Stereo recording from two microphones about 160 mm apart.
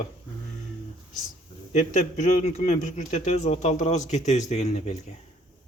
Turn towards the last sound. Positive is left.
turn(degrees=45)  # may be behind; listen again after turning